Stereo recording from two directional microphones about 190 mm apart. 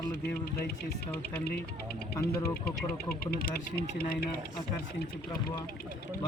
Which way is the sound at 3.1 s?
55° left (ahead or behind).